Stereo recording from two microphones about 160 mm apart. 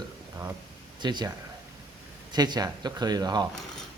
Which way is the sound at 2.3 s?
25° right (ahead or behind).